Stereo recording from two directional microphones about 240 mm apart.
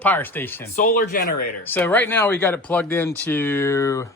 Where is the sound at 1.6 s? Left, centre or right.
Centre.